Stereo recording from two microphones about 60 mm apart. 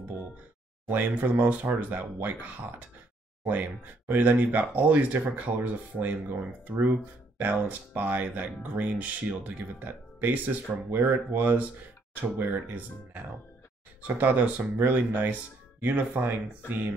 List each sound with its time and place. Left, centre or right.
0.8 s speech: right